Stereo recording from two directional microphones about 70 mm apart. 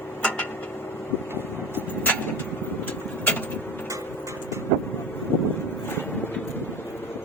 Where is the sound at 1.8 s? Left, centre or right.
Left.